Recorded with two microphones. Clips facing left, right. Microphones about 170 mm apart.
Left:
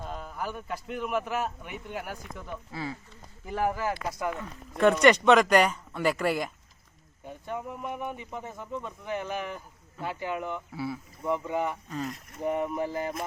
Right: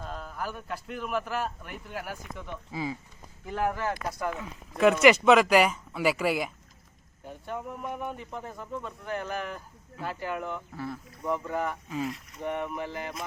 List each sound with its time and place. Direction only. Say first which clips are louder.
0.0 s speech: left 1 dB; 5° left (ahead or behind)
2.7 s speech: right 3 dB; 15° right (ahead or behind)
3.4 s speech: left 1 dB; 5° left (ahead or behind)
7.4 s speech: even; 5° left (ahead or behind)
11.9 s speech: right 2 dB; 5° right (ahead or behind)
12.4 s a sound: left 4 dB; 30° left (ahead or behind)